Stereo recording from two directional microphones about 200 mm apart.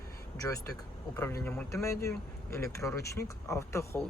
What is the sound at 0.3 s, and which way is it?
Speech, 15° left (ahead or behind).